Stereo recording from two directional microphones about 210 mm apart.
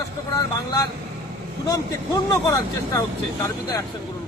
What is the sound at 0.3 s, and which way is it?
Speech, 15° left (ahead or behind).